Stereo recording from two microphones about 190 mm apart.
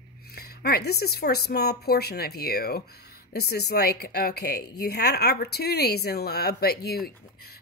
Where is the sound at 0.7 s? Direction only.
55° left (ahead or behind).